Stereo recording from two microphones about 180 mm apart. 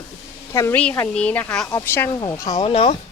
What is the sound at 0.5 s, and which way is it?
Speech, 15° left (ahead or behind).